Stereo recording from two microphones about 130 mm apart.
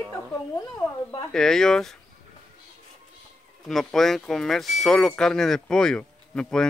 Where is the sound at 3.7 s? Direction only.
Centre (ahead or behind).